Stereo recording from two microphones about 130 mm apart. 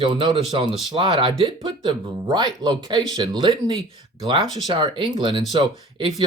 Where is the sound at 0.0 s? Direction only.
40° right (ahead or behind).